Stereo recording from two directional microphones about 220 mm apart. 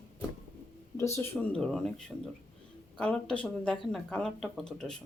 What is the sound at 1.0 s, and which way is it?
Speech, 10° left (ahead or behind).